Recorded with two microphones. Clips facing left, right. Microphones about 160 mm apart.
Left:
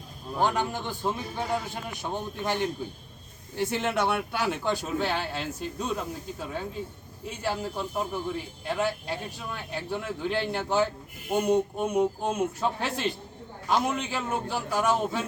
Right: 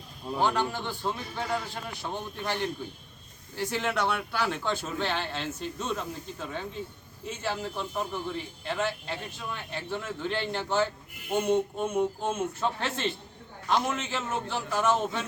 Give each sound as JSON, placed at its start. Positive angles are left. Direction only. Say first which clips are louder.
{"t": 0.4, "sound": "a man's voice", "louder": "left 1 dB", "side_deg": 15}